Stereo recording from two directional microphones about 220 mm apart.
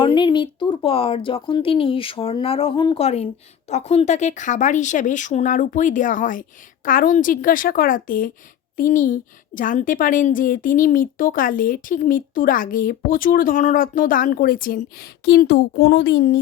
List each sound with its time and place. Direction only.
0.0 s a woman's voice: 20° left (ahead or behind); by 16.4 s 50° left (ahead or behind)